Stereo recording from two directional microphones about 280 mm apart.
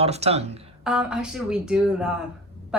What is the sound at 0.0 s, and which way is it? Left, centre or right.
Speech, right.